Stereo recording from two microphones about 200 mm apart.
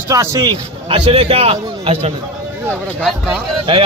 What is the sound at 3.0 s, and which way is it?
Speech, 5° right (ahead or behind).